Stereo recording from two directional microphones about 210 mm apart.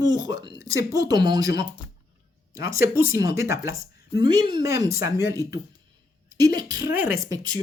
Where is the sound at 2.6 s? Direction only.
15° right (ahead or behind).